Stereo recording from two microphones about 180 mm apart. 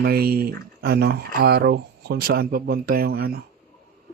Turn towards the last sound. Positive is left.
turn(degrees=-60)  # may be behind; listen again after turning